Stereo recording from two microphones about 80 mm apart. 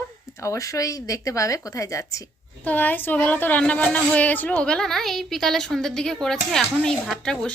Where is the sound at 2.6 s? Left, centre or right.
Left.